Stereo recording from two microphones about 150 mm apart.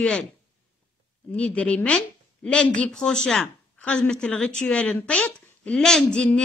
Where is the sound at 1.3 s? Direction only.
10° left (ahead or behind).